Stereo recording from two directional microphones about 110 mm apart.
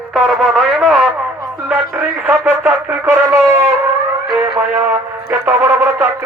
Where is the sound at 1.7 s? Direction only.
15° right (ahead or behind).